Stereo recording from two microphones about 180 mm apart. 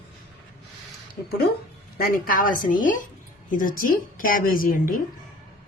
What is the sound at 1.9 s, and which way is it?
A woman's voice, 50° left (ahead or behind).